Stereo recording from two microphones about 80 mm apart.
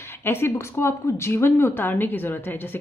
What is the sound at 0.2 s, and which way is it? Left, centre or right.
Speech, left.